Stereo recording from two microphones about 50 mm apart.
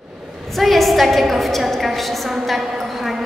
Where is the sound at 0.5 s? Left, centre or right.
Centre.